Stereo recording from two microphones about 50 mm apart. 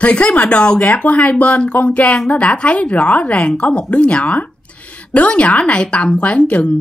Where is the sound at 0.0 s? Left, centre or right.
Left.